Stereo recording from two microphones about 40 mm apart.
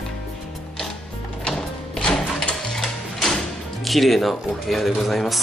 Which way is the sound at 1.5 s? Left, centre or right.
Left.